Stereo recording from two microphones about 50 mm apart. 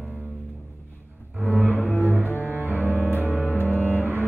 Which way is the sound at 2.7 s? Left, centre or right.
Left.